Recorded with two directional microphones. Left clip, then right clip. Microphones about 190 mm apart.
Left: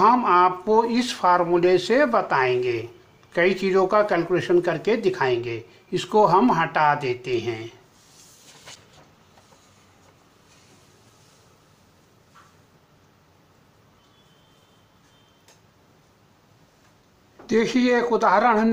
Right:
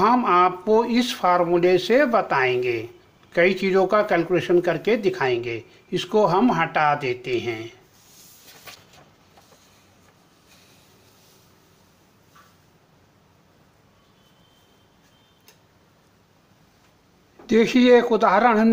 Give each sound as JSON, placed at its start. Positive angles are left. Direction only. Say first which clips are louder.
{"t": 0.0, "sound": "speech", "louder": "left 1 dB", "side_deg": -25}
{"t": 17.5, "sound": "speech", "louder": "right 5 dB", "side_deg": -35}